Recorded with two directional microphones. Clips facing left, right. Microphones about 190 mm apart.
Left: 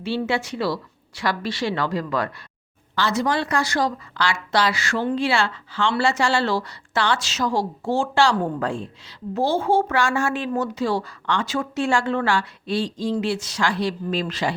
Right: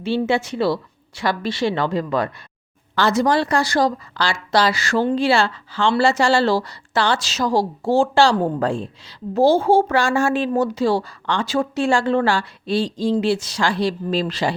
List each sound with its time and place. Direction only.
0.0 s a woman's voice: 25° right (ahead or behind)
2.9 s a woman's voice: 45° right (ahead or behind)